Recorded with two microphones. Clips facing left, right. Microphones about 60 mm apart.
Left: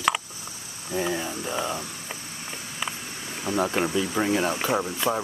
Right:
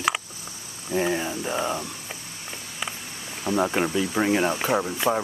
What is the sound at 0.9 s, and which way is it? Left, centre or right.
Speech, right.